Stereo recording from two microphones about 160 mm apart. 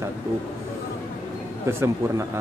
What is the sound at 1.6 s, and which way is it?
Speech, 15° right (ahead or behind).